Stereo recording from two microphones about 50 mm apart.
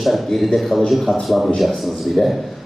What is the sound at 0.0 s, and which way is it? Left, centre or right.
A man's voice, centre.